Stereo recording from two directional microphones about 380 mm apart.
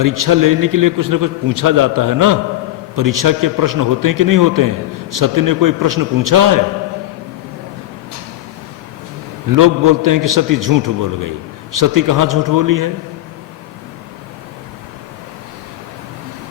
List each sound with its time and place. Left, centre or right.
0.0 s a man's voice: right
9.6 s a man's voice: right